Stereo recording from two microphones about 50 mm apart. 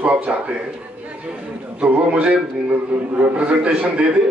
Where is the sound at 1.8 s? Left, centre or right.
Right.